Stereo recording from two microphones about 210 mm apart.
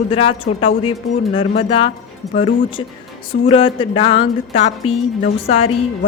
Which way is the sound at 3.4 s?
25° left (ahead or behind).